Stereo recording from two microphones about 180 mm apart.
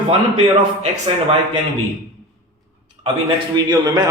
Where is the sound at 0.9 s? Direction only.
35° right (ahead or behind).